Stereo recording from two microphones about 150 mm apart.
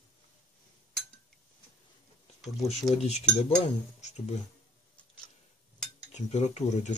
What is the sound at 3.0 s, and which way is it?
Speech, 45° left (ahead or behind).